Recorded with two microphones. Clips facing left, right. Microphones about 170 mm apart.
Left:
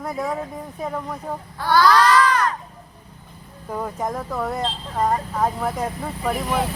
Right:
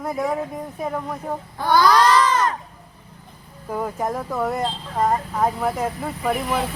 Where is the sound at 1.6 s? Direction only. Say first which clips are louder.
Even; 20° right (ahead or behind).